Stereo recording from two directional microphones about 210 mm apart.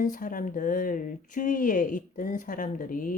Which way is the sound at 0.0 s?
40° left (ahead or behind).